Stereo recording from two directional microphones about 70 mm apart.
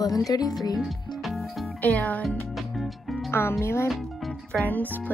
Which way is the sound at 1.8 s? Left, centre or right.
Left.